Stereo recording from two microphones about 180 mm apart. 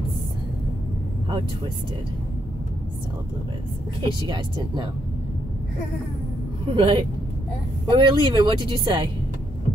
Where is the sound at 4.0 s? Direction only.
25° right (ahead or behind).